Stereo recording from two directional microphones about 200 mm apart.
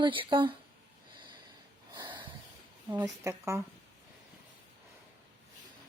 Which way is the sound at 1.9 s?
25° right (ahead or behind).